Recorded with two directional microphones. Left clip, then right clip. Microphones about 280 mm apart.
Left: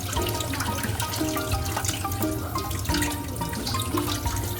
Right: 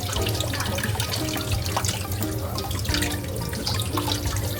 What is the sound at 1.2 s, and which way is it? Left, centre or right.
Music, centre.